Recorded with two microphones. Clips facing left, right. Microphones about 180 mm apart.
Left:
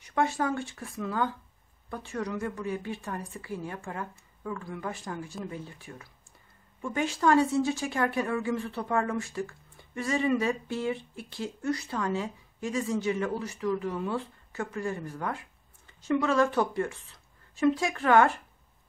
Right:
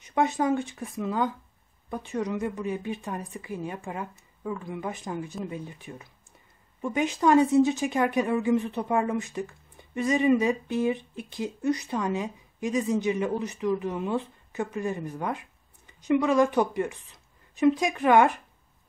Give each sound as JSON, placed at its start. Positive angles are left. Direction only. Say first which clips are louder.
{"t": 0.0, "sound": "a woman's voice", "louder": "right 3 dB", "side_deg": -20}